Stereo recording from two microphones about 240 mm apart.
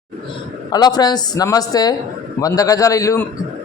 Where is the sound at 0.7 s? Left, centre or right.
Centre.